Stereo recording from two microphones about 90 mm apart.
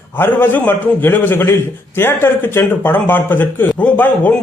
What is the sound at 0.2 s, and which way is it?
A man's voice, 20° left (ahead or behind).